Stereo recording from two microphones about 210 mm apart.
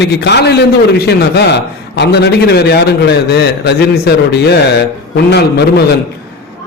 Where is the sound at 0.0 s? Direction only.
50° left (ahead or behind).